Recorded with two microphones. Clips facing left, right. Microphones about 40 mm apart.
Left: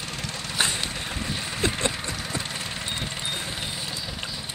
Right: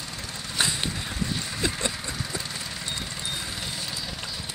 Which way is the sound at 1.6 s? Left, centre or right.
Left.